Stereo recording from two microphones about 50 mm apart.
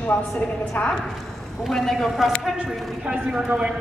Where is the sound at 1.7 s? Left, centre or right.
Centre.